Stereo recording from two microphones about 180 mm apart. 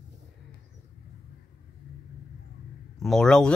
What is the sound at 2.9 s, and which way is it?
Speech, centre (ahead or behind).